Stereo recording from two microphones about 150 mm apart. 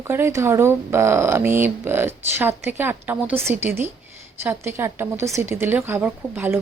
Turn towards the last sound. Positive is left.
turn(degrees=-10)  # may be behind; listen again after turning